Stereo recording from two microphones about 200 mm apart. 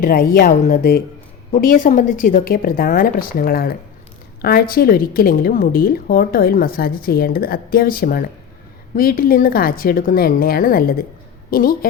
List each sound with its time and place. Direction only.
0.0 s a woman's voice: 45° left (ahead or behind)